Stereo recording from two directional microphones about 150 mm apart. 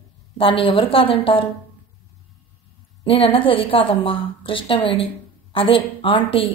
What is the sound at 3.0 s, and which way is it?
A woman's voice, 35° left (ahead or behind).